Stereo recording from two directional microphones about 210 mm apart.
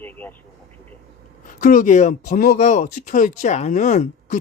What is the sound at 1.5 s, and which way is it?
Speech, 40° left (ahead or behind).